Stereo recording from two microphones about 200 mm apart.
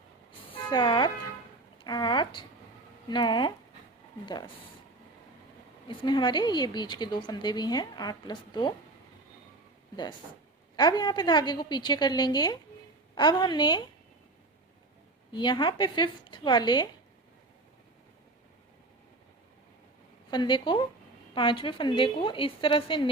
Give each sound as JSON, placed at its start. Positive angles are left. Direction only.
{"t": 0.5, "sound": "speech", "side_deg": 25}
{"t": 5.9, "sound": "speech", "side_deg": 25}
{"t": 9.9, "sound": "speech", "side_deg": 20}
{"t": 15.3, "sound": "speech", "side_deg": 20}
{"t": 20.3, "sound": "speech", "side_deg": 25}